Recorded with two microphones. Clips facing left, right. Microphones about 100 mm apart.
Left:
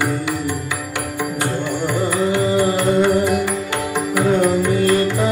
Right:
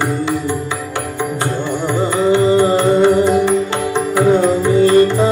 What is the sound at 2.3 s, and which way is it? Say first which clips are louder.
Music: right 6 dB; 20° right (ahead or behind).